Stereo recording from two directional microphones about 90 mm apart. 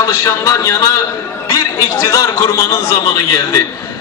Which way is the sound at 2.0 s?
40° left (ahead or behind).